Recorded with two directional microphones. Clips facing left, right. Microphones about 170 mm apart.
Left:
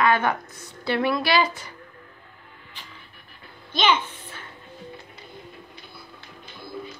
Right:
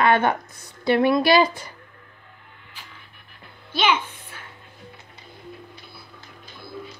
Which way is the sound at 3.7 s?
10° right (ahead or behind).